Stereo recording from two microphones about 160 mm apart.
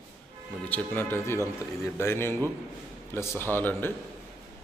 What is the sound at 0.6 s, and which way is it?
A man's voice, 10° left (ahead or behind).